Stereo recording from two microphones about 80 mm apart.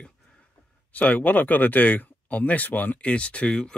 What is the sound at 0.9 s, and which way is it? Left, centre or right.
Speech, centre.